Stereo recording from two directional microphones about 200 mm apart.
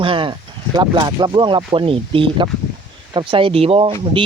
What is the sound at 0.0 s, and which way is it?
Speech, 25° right (ahead or behind).